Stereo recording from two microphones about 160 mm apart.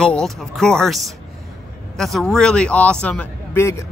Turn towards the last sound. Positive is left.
turn(degrees=15)  # may be behind; listen again after turning